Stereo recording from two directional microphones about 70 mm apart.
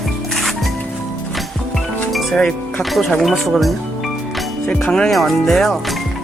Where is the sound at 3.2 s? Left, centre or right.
Centre.